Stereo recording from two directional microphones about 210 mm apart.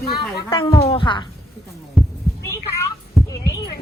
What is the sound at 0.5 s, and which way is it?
Speech, 25° left (ahead or behind).